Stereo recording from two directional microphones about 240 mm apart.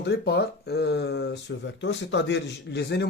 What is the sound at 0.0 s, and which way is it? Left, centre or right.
Speech, left.